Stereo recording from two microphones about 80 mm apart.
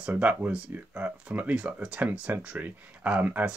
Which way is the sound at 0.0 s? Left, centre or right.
Centre.